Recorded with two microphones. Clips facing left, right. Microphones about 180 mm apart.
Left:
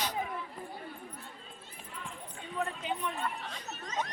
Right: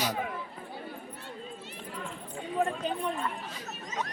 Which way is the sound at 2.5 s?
45° right (ahead or behind).